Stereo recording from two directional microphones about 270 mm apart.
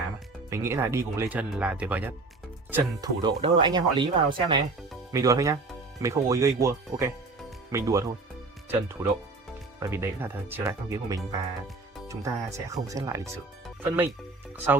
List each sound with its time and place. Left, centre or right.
0.5 s speech: centre